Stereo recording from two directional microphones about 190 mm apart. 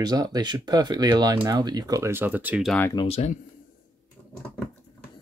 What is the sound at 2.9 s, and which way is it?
Speech, 30° left (ahead or behind).